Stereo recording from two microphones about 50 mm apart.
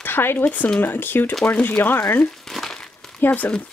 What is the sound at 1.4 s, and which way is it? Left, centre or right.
Speech, left.